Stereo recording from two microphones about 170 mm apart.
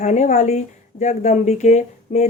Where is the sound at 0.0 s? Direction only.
45° left (ahead or behind).